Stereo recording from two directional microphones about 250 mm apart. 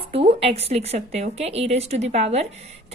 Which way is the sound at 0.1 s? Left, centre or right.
Right.